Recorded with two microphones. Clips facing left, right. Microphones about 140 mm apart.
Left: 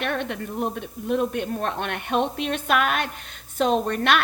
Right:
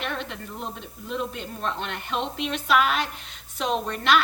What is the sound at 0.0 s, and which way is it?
A woman's voice, 55° left (ahead or behind).